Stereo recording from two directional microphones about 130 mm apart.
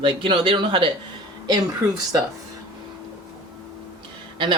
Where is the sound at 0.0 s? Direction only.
40° right (ahead or behind).